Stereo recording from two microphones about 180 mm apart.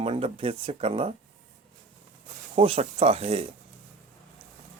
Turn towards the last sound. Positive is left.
turn(degrees=-35)  # may be behind; listen again after turning